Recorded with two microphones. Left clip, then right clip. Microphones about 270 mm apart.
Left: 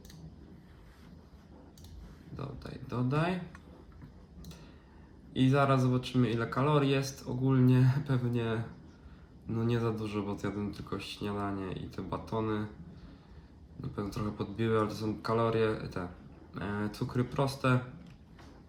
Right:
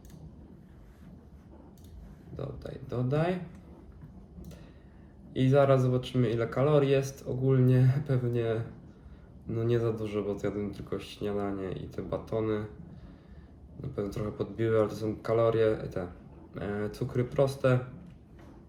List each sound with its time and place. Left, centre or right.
2.3 s speech: centre
5.3 s speech: centre
13.9 s speech: centre